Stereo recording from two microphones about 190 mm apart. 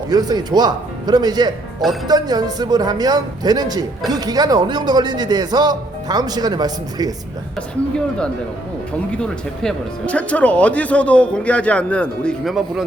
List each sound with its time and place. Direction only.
0.1 s a man's voice: 20° right (ahead or behind)
9.1 s speech: 5° left (ahead or behind)